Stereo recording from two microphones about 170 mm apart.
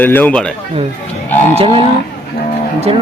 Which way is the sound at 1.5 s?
35° right (ahead or behind).